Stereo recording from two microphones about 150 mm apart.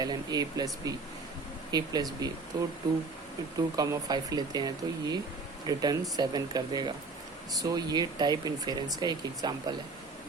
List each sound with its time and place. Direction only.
0.0 s speech: 25° right (ahead or behind)
3.8 s speech: 25° right (ahead or behind)